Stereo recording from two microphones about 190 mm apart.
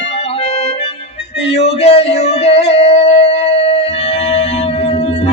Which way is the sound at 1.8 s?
30° left (ahead or behind).